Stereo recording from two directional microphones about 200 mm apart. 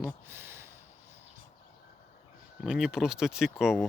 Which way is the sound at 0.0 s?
10° right (ahead or behind).